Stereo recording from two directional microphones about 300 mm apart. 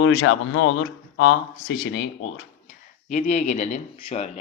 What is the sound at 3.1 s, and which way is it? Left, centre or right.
Speech, left.